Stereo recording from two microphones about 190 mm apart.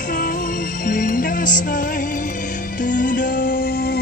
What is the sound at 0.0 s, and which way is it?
Music, 45° left (ahead or behind).